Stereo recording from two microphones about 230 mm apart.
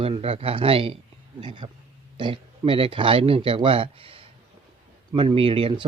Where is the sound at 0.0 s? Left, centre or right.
Right.